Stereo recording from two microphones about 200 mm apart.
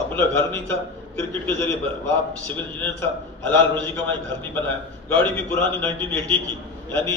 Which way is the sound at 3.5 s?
10° left (ahead or behind).